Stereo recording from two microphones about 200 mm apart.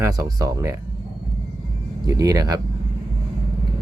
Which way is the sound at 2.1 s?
15° right (ahead or behind).